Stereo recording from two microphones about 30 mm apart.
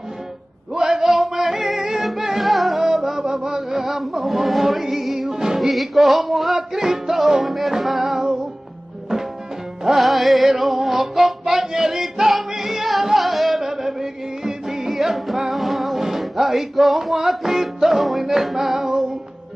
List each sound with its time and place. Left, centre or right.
0.7 s music: centre
2.4 s music: centre
2.8 s music: centre
3.8 s chant: centre
5.3 s music: centre
5.6 s music: centre
7.4 s music: centre
9.9 s music: centre